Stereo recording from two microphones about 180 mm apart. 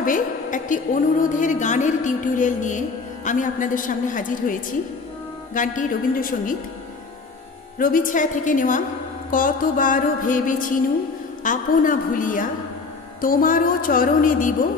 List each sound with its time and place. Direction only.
0.0 s a woman's voice: 45° left (ahead or behind)
1.2 s music: 45° left (ahead or behind)
7.8 s music: 50° left (ahead or behind)